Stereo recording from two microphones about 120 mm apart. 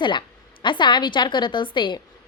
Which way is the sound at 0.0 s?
40° left (ahead or behind).